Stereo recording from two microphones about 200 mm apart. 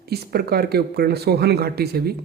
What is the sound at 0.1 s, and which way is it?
Speech, 50° right (ahead or behind).